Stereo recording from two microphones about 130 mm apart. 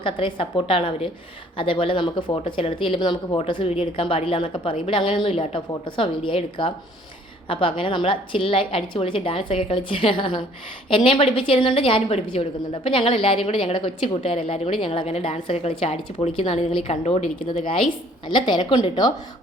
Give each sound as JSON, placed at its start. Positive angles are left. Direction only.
{"t": 0.0, "sound": "a woman's voice", "side_deg": 40}
{"t": 18.3, "sound": "a woman's voice", "side_deg": 35}